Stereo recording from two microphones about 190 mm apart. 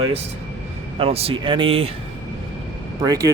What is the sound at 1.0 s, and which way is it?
Speech, 30° right (ahead or behind).